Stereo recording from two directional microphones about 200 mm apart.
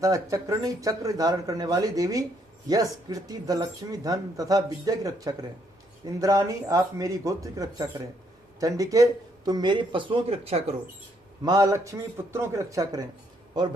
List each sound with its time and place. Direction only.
0.0 s speech: 15° right (ahead or behind)
11.4 s speech: 20° right (ahead or behind)